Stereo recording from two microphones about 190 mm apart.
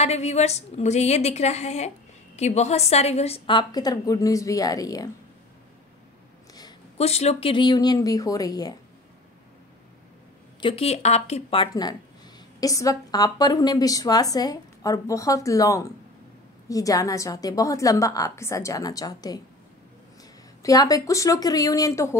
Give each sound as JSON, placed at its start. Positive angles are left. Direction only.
{"t": 0.0, "sound": "a woman's voice", "side_deg": 35}
{"t": 7.0, "sound": "speech", "side_deg": 35}
{"t": 10.6, "sound": "a woman's voice", "side_deg": 30}
{"t": 20.6, "sound": "speech", "side_deg": 20}